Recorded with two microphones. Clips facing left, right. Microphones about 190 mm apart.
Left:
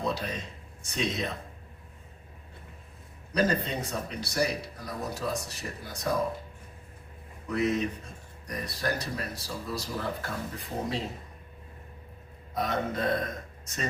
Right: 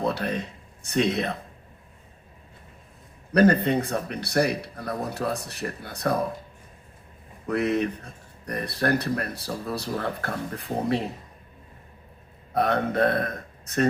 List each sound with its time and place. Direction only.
0.0 s speech: 60° right (ahead or behind)
3.3 s speech: 60° right (ahead or behind)
7.4 s speech: 60° right (ahead or behind)
12.5 s a man's voice: 60° right (ahead or behind)